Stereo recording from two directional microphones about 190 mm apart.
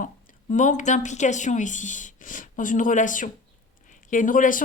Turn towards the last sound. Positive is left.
turn(degrees=45)  # may be behind; listen again after turning